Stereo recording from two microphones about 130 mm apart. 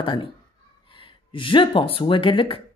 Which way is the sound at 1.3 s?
40° left (ahead or behind).